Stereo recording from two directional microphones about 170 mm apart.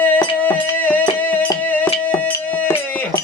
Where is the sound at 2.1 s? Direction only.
10° left (ahead or behind).